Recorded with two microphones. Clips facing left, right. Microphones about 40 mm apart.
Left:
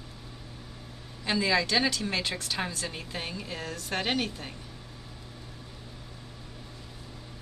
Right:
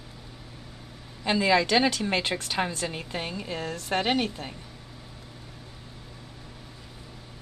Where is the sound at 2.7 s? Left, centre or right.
Right.